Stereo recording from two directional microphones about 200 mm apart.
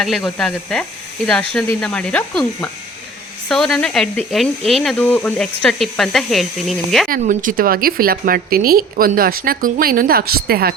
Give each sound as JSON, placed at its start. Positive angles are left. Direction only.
{"t": 0.0, "sound": "speech", "side_deg": 0}
{"t": 7.1, "sound": "a woman's voice", "side_deg": -45}